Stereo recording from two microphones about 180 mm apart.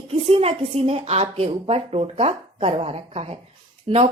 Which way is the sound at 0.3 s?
35° right (ahead or behind).